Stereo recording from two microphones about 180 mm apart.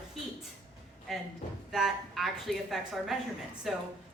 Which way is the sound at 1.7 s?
Centre (ahead or behind).